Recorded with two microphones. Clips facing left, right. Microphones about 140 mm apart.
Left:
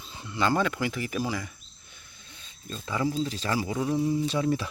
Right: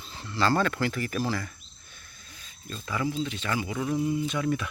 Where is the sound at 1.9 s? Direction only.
25° left (ahead or behind).